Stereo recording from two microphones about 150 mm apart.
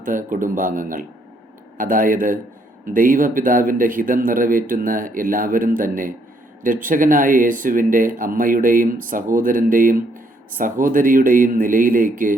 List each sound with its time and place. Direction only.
0.0 s speech: 65° right (ahead or behind)